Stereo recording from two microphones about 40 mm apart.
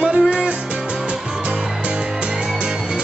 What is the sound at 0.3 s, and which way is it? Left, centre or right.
Music, right.